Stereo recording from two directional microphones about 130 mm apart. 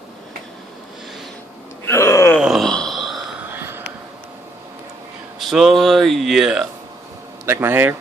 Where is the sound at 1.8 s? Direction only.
20° left (ahead or behind).